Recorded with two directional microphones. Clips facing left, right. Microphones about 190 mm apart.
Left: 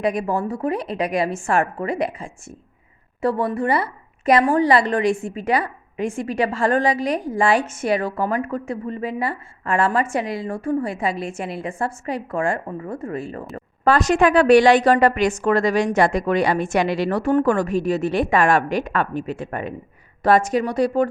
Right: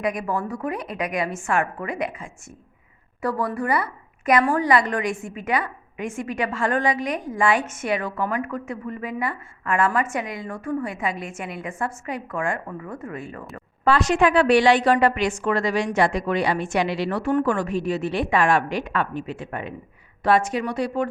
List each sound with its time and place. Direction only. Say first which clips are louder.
0.0 s speech: left 4 dB; 30° left (ahead or behind)
13.8 s a woman's voice: left 2 dB; 45° left (ahead or behind)